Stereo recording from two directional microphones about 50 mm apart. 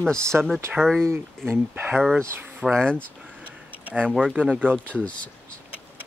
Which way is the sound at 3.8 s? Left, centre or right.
Right.